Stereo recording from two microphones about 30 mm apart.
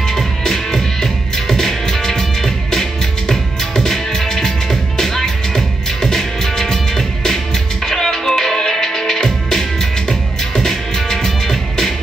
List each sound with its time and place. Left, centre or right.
0.4 s music: centre